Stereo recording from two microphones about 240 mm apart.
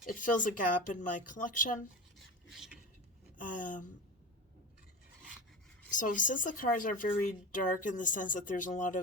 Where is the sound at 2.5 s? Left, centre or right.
Centre.